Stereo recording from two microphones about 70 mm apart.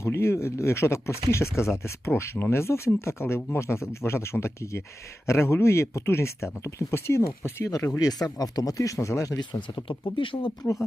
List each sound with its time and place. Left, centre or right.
0.0 s speech: left
7.9 s speech: left